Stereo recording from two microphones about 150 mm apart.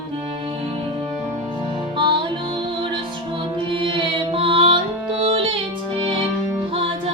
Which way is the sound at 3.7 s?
35° right (ahead or behind).